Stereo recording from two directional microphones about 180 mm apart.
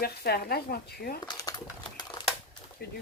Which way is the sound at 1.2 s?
20° left (ahead or behind).